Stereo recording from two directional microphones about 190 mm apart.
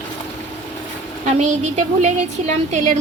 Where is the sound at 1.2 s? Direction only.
35° right (ahead or behind).